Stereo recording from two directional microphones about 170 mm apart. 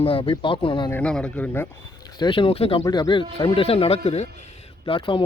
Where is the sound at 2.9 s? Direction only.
25° left (ahead or behind).